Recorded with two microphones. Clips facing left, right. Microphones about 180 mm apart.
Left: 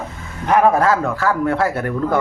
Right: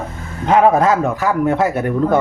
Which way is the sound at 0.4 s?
20° right (ahead or behind).